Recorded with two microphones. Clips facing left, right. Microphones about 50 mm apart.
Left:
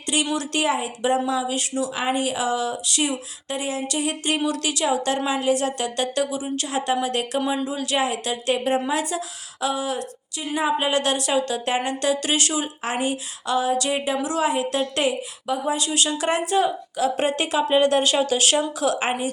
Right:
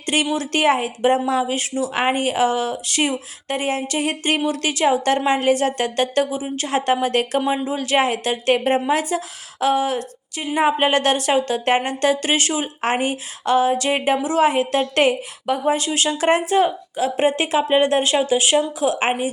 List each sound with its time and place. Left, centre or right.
0.0 s a sound: right
0.3 s a woman's voice: right
7.4 s a woman's voice: right